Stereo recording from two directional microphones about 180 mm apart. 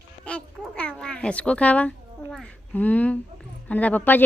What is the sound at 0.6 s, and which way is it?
Babbling, centre (ahead or behind).